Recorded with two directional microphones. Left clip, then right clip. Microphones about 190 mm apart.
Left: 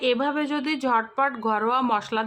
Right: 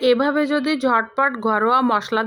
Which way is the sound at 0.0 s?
25° right (ahead or behind).